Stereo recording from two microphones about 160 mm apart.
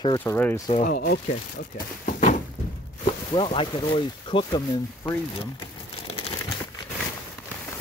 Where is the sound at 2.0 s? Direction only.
55° left (ahead or behind).